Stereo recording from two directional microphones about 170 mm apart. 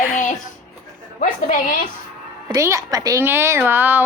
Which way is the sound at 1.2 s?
50° left (ahead or behind).